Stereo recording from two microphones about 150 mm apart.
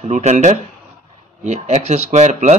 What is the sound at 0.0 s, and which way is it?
Speech, 50° right (ahead or behind).